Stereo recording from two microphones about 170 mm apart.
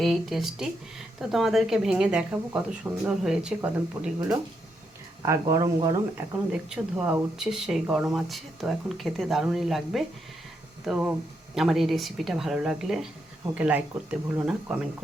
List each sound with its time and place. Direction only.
0.0 s speech: centre (ahead or behind)
5.2 s speech: 20° right (ahead or behind)
6.5 s speech: 5° right (ahead or behind)